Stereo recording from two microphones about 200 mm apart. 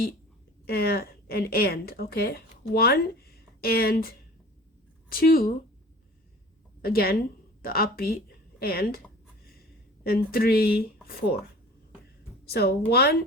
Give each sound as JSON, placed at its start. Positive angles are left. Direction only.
{"t": 0.7, "sound": "a woman's voice", "side_deg": 50}
{"t": 6.8, "sound": "a woman's voice", "side_deg": 50}
{"t": 12.5, "sound": "a woman's voice", "side_deg": 50}